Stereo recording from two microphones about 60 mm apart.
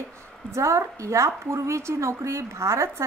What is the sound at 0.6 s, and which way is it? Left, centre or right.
A woman's voice, right.